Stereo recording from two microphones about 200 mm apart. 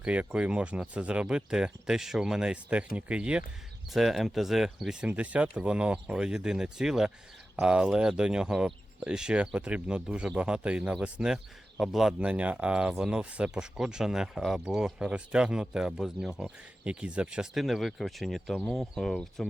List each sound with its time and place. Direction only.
0.0 s speech: 5° right (ahead or behind)